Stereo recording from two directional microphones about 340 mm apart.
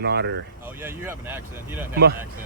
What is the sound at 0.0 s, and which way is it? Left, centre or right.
Speech, right.